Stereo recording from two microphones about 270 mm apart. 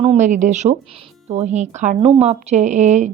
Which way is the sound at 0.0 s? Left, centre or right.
Right.